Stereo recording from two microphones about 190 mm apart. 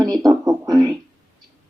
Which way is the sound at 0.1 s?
20° right (ahead or behind).